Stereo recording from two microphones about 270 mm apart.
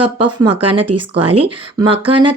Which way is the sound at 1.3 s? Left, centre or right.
Centre.